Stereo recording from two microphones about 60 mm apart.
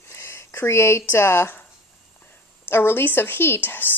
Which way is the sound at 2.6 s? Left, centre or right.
Left.